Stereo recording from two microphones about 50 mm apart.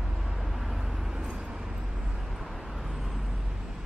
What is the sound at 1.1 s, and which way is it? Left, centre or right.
Vehicle, centre.